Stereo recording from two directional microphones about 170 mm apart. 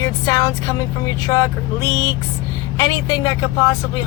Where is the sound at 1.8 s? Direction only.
20° left (ahead or behind).